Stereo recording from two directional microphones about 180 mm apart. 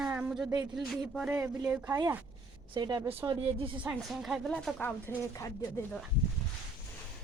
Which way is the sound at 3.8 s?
5° right (ahead or behind).